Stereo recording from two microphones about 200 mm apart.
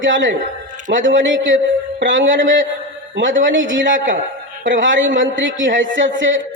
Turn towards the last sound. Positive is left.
turn(degrees=-70)  # may be behind; listen again after turning